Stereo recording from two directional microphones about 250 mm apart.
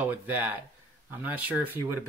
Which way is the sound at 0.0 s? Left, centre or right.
Centre.